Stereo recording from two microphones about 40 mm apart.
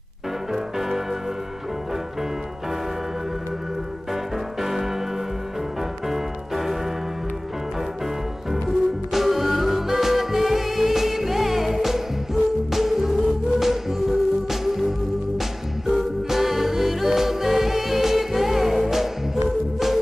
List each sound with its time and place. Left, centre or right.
0.5 s music: centre
4.1 s music: centre
8.5 s music: centre